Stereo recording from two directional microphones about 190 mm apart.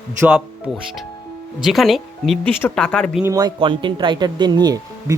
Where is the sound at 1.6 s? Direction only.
Centre (ahead or behind).